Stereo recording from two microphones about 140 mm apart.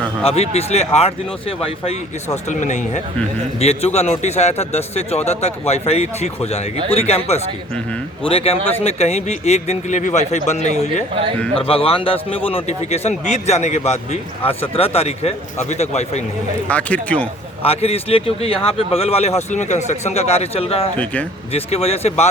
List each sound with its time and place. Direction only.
0.2 s a man's voice: 45° left (ahead or behind)
11.5 s a man's voice: 40° left (ahead or behind)
16.6 s speech: 10° left (ahead or behind)
17.6 s a man's voice: 45° left (ahead or behind)
21.0 s speech: 10° left (ahead or behind)
21.5 s a man's voice: 45° left (ahead or behind)